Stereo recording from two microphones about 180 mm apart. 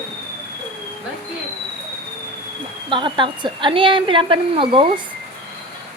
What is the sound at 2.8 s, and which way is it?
A woman's voice, 25° right (ahead or behind).